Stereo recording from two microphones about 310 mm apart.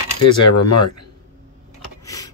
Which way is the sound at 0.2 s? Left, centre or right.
Left.